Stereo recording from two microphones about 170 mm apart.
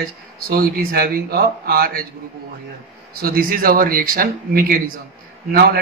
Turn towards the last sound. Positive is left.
turn(degrees=-65)  # may be behind; listen again after turning